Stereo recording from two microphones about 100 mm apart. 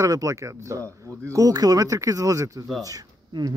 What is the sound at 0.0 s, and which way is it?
Speech, 35° right (ahead or behind).